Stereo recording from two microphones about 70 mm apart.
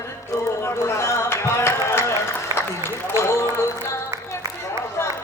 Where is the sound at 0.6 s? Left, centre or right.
Left.